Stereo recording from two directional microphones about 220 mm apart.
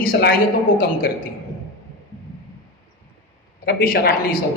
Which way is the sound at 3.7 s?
45° left (ahead or behind).